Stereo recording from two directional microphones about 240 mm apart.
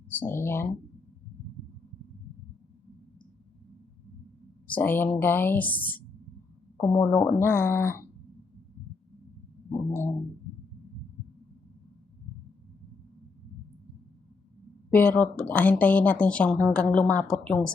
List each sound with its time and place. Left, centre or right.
0.2 s a woman's voice: centre
4.7 s a woman's voice: centre
14.8 s a woman's voice: centre